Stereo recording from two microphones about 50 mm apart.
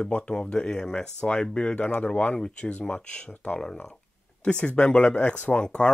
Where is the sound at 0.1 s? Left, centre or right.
Left.